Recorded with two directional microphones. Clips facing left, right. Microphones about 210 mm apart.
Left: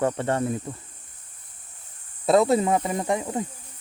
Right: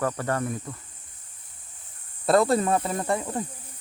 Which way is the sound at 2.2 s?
Centre (ahead or behind).